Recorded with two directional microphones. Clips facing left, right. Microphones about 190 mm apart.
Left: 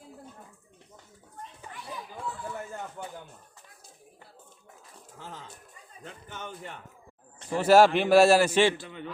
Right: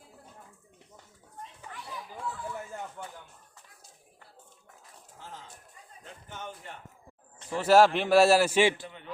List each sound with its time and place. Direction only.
3.0 s a sound: 5° left (ahead or behind)
6.2 s a man's voice: 80° left
7.5 s a man's voice: centre (ahead or behind)